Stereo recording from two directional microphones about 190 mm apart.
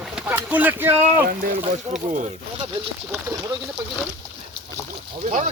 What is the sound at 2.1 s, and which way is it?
Speech, 40° right (ahead or behind).